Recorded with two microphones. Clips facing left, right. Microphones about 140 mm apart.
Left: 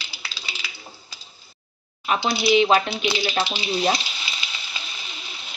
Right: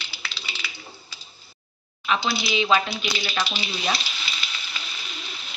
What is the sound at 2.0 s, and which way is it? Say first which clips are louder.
Speech: left 2 dB; 45° left (ahead or behind).